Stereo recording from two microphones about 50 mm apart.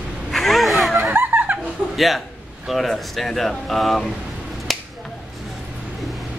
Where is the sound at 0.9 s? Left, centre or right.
Right.